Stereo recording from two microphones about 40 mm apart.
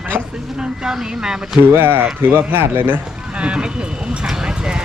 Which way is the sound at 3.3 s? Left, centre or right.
Right.